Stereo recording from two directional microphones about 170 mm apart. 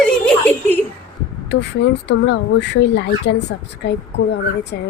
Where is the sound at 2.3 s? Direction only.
90° left.